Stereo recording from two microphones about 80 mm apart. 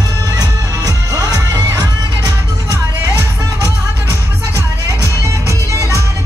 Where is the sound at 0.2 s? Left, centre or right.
Right.